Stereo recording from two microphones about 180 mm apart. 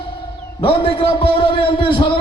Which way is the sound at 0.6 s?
30° left (ahead or behind).